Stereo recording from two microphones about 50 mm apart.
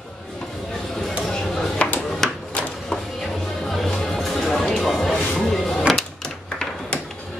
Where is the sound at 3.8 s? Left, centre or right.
Centre.